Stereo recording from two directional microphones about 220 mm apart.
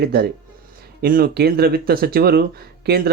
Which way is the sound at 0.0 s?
45° right (ahead or behind).